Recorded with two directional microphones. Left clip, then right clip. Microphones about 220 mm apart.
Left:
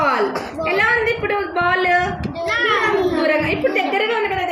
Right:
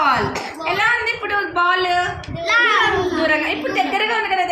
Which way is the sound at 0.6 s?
25° right (ahead or behind).